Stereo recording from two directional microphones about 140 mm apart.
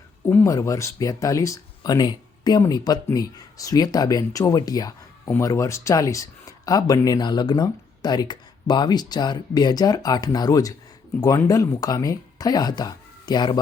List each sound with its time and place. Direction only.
0.3 s speech: 20° left (ahead or behind)